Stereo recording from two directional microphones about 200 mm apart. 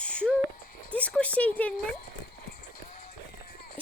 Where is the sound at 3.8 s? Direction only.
25° right (ahead or behind).